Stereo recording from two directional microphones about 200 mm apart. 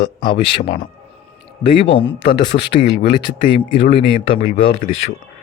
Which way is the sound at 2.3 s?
25° left (ahead or behind).